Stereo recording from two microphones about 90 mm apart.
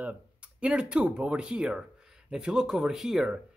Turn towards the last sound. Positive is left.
turn(degrees=-5)  # may be behind; listen again after turning